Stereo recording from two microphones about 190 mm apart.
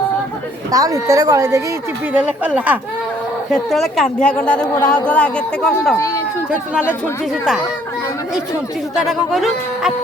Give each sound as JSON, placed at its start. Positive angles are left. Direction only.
{"t": 0.7, "sound": "a woman's voice", "side_deg": -20}
{"t": 9.0, "sound": "a woman's voice", "side_deg": 0}